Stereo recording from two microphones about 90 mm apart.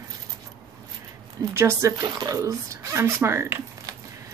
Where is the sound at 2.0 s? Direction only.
40° right (ahead or behind).